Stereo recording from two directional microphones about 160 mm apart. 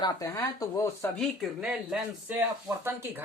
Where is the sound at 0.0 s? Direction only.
20° left (ahead or behind).